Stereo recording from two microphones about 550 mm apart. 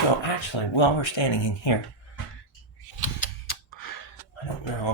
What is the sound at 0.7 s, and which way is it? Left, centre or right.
Speech, left.